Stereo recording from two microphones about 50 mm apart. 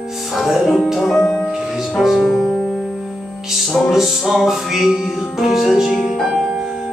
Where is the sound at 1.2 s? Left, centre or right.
Centre.